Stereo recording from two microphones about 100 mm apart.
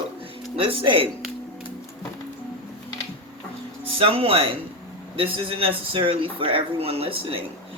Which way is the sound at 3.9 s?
65° right (ahead or behind).